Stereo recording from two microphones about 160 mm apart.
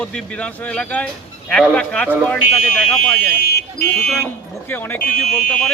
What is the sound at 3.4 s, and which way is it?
Speech, 75° left (ahead or behind).